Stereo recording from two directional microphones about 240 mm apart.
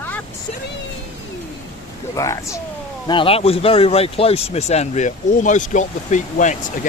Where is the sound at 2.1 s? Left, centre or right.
Centre.